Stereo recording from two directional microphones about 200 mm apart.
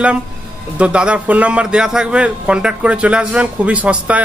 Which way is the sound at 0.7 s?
5° right (ahead or behind).